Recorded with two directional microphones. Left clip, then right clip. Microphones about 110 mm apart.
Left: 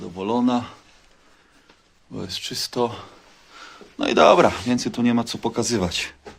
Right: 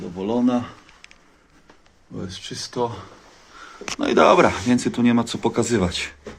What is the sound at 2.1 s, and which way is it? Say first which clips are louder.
Speech: left 4 dB; 80° left.